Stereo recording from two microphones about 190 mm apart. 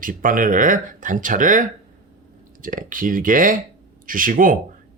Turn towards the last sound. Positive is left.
turn(degrees=-45)  # may be behind; listen again after turning